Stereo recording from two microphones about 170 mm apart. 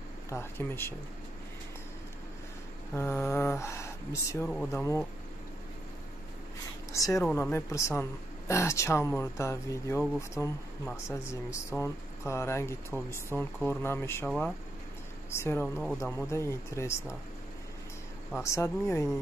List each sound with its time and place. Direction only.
0.3 s speech: 15° left (ahead or behind)
2.9 s speech: 15° left (ahead or behind)
4.5 s speech: centre (ahead or behind)
6.9 s a woman's voice: 20° left (ahead or behind)
15.3 s speech: 15° left (ahead or behind)
18.4 s speech: 15° left (ahead or behind)